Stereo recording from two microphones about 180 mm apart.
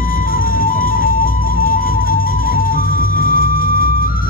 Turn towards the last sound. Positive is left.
turn(degrees=50)  # may be behind; listen again after turning